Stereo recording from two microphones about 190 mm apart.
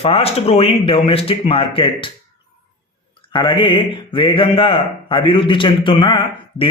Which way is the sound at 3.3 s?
25° left (ahead or behind).